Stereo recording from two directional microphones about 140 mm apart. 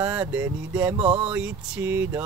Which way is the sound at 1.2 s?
10° right (ahead or behind).